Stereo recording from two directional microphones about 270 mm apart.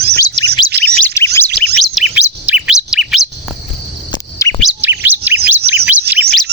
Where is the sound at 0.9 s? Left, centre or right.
Centre.